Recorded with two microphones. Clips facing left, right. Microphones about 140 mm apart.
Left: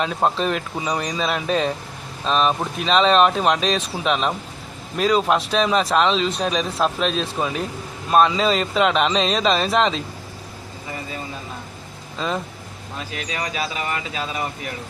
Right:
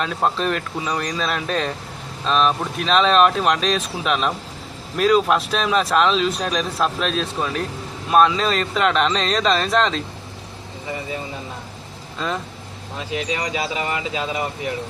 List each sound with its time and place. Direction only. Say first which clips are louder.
0.0 s speech: left 1 dB; 5° left (ahead or behind)
12.2 s speech: even; centre (ahead or behind)
13.0 s speech: right 4 dB; 20° right (ahead or behind)